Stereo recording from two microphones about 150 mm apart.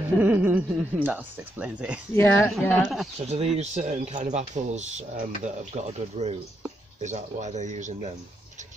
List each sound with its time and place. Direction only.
0.2 s speech: 10° right (ahead or behind)
2.1 s speech: 15° left (ahead or behind)
2.8 s speech: centre (ahead or behind)
3.2 s speech: 45° right (ahead or behind)